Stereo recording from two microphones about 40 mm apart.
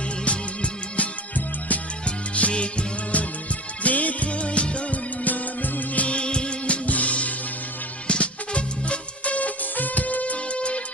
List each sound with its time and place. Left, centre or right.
0.3 s music: left
2.0 s music: left
5.2 s music: left
6.8 s music: left